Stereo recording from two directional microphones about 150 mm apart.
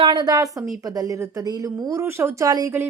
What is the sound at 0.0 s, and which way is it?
Speech, 30° right (ahead or behind).